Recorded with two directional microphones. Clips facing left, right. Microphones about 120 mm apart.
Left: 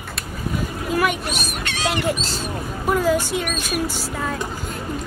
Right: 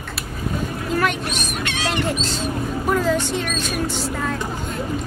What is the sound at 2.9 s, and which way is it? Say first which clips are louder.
Speech: left 2 dB; 10° left (ahead or behind).